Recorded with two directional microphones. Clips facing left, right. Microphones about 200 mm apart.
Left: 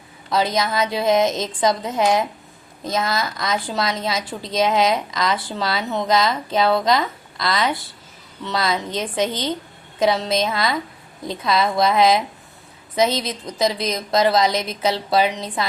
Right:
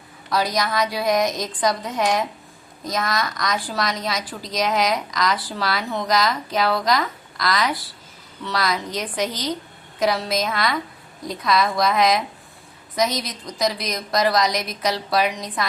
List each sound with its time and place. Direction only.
0.3 s a woman's voice: 25° left (ahead or behind)